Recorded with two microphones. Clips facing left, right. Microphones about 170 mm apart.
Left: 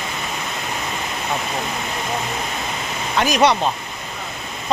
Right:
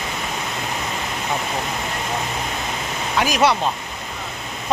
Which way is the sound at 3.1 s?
5° right (ahead or behind).